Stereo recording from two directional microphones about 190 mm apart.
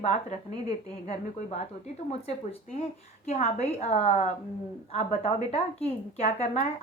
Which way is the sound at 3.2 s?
35° left (ahead or behind).